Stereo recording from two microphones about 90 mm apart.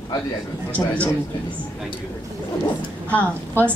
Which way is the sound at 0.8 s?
20° left (ahead or behind).